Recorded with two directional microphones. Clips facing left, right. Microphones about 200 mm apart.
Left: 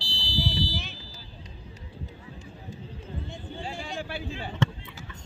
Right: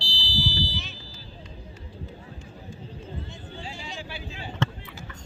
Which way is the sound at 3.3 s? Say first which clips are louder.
Left 3 dB; 55° left (ahead or behind).